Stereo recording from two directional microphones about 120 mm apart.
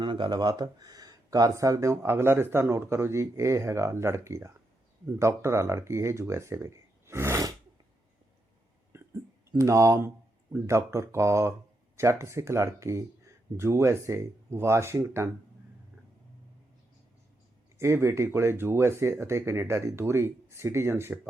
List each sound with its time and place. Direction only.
0.0 s speech: 40° right (ahead or behind); by 7.5 s 25° right (ahead or behind)
8.9 s a sound: 25° right (ahead or behind)
9.5 s speech: 25° right (ahead or behind)
17.7 s speech: 20° right (ahead or behind)